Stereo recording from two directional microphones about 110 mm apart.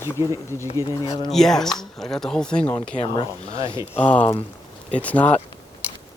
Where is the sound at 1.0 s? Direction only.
35° left (ahead or behind).